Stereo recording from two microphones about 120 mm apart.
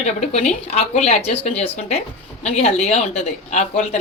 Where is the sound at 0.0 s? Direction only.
70° left (ahead or behind).